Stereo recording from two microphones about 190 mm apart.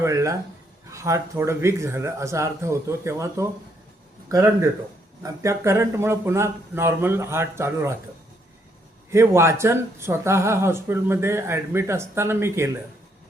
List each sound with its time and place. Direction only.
0.0 s speech: 15° right (ahead or behind)
9.0 s speech: 15° right (ahead or behind)